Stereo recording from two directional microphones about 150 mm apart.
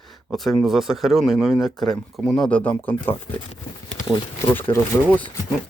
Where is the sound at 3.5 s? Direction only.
50° left (ahead or behind).